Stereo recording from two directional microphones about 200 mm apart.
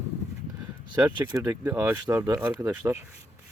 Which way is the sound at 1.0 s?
20° right (ahead or behind).